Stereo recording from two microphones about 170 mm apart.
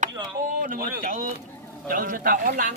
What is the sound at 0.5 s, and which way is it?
Speech, 55° right (ahead or behind).